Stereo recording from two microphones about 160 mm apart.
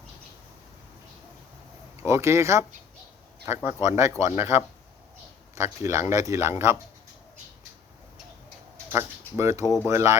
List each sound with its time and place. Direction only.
2.0 s speech: 15° right (ahead or behind)
8.9 s speech: 15° right (ahead or behind)